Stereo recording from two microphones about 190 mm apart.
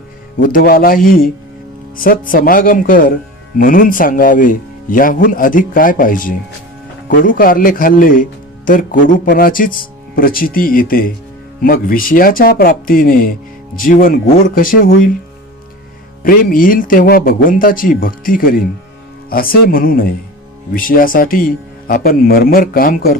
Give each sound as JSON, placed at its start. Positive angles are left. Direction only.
{"t": 0.3, "sound": "a man's voice", "side_deg": 45}
{"t": 16.2, "sound": "a man's voice", "side_deg": 45}